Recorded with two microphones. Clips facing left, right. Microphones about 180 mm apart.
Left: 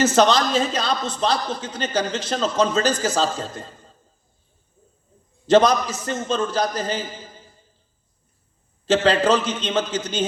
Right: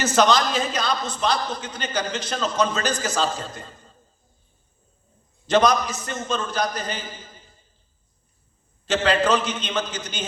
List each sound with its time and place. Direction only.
0.0 s a man's voice: 25° left (ahead or behind)
5.5 s a man's voice: 30° left (ahead or behind)
8.9 s a man's voice: 30° left (ahead or behind)